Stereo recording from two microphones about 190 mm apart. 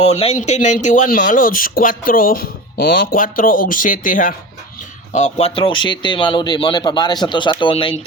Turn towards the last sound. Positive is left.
turn(degrees=25)  # may be behind; listen again after turning